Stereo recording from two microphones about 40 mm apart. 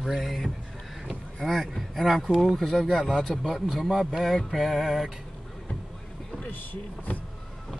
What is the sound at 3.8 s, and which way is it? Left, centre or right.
Speech, centre.